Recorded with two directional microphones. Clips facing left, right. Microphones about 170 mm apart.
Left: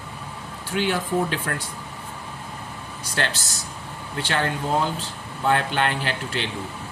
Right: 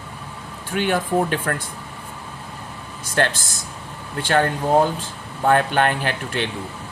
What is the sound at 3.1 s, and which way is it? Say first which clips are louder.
Speech: right 6 dB; 50° right (ahead or behind).